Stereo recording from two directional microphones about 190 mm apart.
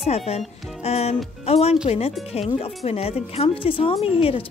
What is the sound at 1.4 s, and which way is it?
Speech, 30° left (ahead or behind).